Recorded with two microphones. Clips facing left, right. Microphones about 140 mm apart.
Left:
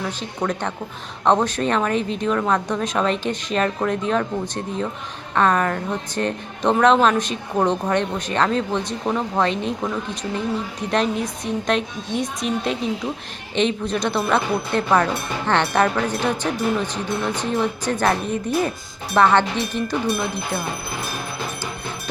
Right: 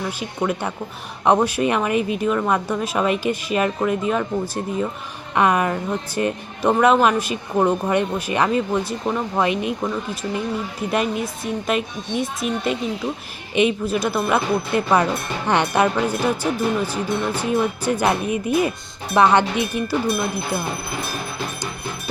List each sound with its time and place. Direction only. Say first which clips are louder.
0.2 s a woman's voice: right 1 dB; 10° right (ahead or behind)